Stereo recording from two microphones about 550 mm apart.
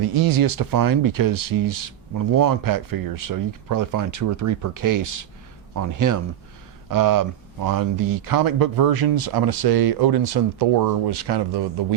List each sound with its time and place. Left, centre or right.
0.0 s speech: right